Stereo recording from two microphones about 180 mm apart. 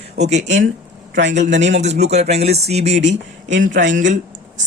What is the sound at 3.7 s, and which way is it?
Speech, 85° right.